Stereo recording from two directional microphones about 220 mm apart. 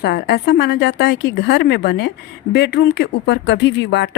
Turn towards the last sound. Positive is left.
turn(degrees=50)  # may be behind; listen again after turning